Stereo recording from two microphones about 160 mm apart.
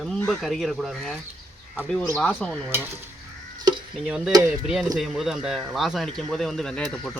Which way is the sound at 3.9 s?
5° right (ahead or behind).